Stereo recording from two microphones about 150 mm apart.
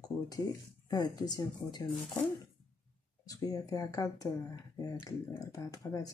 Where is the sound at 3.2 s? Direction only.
25° left (ahead or behind).